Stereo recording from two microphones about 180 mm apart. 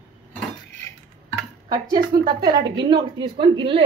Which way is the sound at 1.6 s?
20° right (ahead or behind).